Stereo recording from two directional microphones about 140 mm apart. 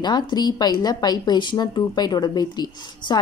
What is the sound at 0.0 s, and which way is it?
A woman's voice, 30° left (ahead or behind).